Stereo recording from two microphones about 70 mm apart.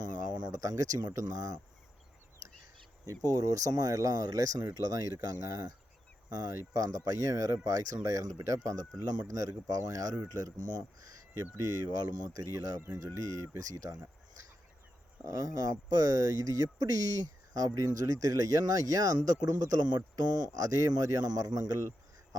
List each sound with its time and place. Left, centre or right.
0.0 s speech: right
3.2 s speech: right
6.8 s speech: right
9.5 s speech: right
13.0 s speech: right
15.2 s speech: right
20.1 s speech: right